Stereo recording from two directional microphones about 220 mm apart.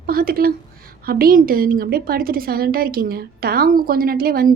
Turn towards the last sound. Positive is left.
turn(degrees=-45)  # may be behind; listen again after turning